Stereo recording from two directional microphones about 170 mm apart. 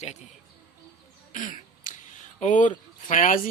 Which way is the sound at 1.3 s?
50° left (ahead or behind).